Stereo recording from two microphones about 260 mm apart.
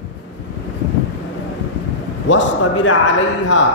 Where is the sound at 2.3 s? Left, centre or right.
Left.